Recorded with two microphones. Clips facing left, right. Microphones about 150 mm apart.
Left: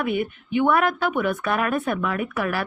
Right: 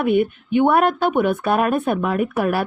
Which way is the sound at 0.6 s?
30° right (ahead or behind).